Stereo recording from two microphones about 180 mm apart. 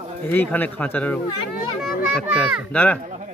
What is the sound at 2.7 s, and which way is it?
Speech, 10° left (ahead or behind).